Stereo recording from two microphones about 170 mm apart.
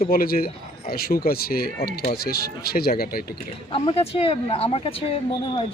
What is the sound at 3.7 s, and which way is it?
Speech, 35° left (ahead or behind).